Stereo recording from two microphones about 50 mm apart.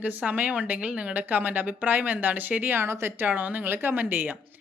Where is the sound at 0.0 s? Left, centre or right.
Right.